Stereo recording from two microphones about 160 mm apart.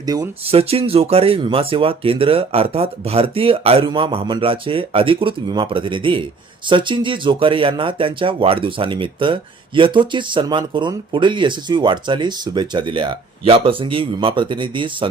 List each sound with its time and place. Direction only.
0.0 s speech: 25° right (ahead or behind)
0.4 s speech: 40° right (ahead or behind)